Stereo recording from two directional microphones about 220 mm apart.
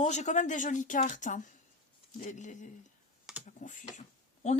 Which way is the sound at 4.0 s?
30° left (ahead or behind).